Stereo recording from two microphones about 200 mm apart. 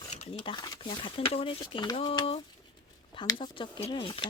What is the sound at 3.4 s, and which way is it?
Speech, 25° left (ahead or behind).